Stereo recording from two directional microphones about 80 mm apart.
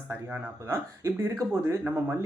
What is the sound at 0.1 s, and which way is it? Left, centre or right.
Speech, right.